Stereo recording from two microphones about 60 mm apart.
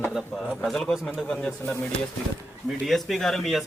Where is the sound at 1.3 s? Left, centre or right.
Centre.